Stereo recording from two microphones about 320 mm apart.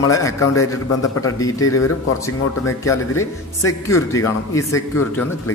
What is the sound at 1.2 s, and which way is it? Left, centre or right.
Speech, centre.